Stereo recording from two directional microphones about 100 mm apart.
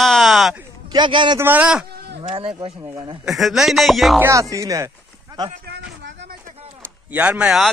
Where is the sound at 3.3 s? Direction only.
Centre (ahead or behind).